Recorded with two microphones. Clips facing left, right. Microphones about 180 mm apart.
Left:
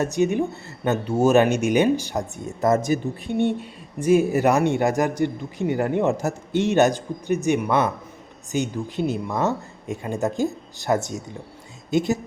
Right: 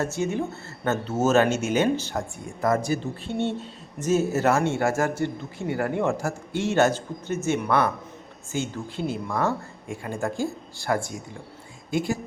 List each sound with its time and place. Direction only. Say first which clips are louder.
0.0 s speech: left 5 dB; 15° left (ahead or behind)